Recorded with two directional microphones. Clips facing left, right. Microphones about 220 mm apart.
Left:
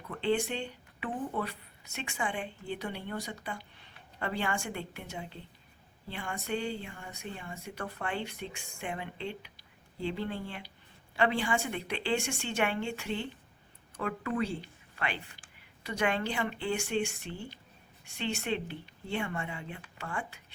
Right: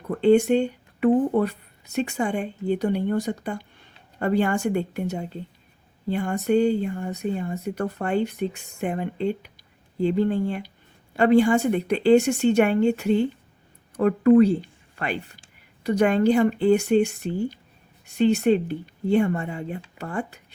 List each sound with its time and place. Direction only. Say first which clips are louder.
0.1 s a woman's voice: right 13 dB; 45° right (ahead or behind)